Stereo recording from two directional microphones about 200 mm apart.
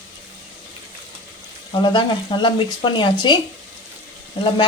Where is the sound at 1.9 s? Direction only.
25° left (ahead or behind).